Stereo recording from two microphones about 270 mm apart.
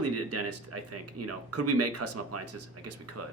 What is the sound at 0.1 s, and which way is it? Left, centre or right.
Speech, right.